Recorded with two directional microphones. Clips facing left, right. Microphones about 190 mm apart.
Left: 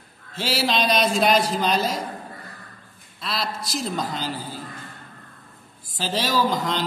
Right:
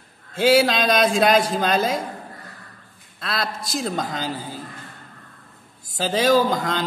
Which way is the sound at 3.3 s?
50° right (ahead or behind).